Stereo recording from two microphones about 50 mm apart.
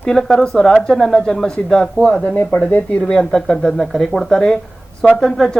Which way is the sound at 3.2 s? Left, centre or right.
Centre.